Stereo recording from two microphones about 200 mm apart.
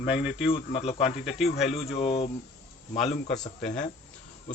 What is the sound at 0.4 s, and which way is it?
Speech, 30° left (ahead or behind).